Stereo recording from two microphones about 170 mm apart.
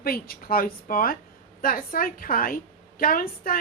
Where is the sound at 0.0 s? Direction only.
60° left (ahead or behind).